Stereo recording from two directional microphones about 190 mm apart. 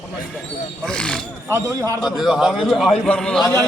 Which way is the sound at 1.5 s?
15° right (ahead or behind).